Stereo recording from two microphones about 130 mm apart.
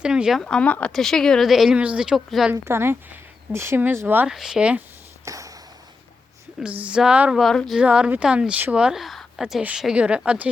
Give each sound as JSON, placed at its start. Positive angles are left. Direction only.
{"t": 0.0, "sound": "speech", "side_deg": -5}
{"t": 0.4, "sound": "speech", "side_deg": 10}
{"t": 2.5, "sound": "a woman's voice", "side_deg": -20}
{"t": 4.3, "sound": "speech", "side_deg": -5}
{"t": 5.2, "sound": "ping", "side_deg": -25}
{"t": 6.6, "sound": "a woman's voice", "side_deg": -10}